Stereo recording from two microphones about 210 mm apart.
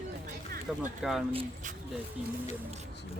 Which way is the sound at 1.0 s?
Centre (ahead or behind).